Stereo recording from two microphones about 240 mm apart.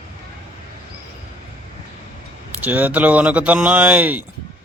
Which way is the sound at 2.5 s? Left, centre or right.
Centre.